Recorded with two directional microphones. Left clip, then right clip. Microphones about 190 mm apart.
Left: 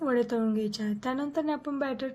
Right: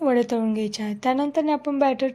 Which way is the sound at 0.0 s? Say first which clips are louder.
Right 6 dB; 15° right (ahead or behind).